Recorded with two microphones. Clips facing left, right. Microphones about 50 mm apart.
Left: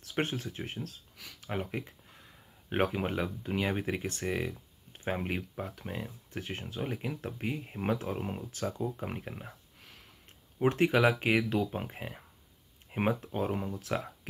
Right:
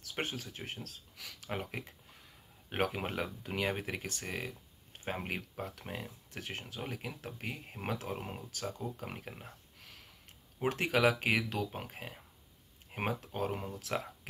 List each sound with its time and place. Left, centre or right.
0.2 s speech: left
0.5 s speech: centre
1.1 s a sound: centre
2.9 s speech: centre
3.8 s speech: centre
4.5 s a sound: centre
5.1 s speech: centre
9.8 s a sound: centre
10.7 s speech: centre
11.0 s speech: centre